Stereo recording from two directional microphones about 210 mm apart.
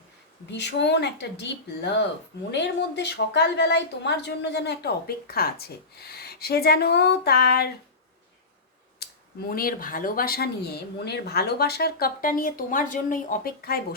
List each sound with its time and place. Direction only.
0.5 s a woman's voice: 55° left (ahead or behind)
9.5 s a woman's voice: 45° left (ahead or behind)